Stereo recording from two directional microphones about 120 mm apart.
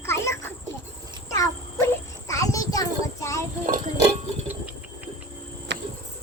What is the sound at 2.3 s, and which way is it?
Child singing, 30° left (ahead or behind).